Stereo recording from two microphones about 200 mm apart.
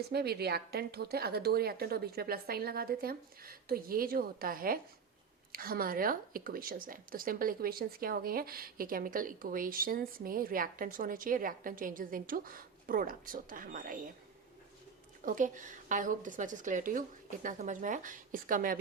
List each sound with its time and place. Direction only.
0.1 s a woman's voice: 55° right (ahead or behind)
15.2 s a woman's voice: 40° right (ahead or behind)